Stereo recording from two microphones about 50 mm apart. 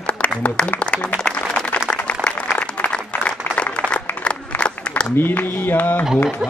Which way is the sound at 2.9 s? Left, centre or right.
Left.